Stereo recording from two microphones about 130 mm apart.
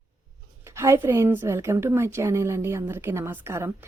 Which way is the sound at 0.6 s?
20° right (ahead or behind).